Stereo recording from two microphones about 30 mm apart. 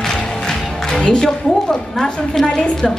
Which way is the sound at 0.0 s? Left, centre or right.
Centre.